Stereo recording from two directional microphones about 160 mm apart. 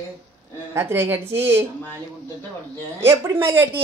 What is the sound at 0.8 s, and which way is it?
Speech, 15° right (ahead or behind).